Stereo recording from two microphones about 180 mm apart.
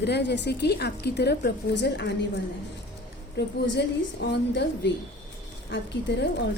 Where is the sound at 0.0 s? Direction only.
70° left (ahead or behind).